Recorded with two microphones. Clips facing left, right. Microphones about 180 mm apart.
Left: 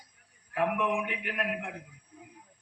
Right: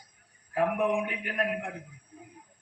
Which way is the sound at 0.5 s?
40° right (ahead or behind).